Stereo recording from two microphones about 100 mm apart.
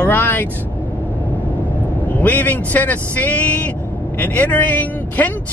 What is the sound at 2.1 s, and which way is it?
Speech, 15° left (ahead or behind).